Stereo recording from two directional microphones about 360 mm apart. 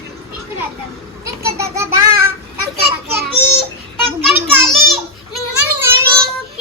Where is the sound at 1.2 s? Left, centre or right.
Centre.